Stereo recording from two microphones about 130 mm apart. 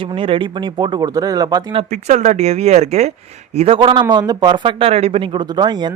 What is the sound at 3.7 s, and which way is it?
Speech, 40° right (ahead or behind).